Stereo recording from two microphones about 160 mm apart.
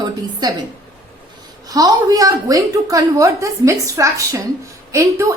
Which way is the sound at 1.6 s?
20° right (ahead or behind).